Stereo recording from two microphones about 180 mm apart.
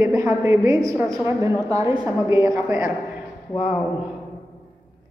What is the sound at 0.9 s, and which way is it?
Speech, centre (ahead or behind).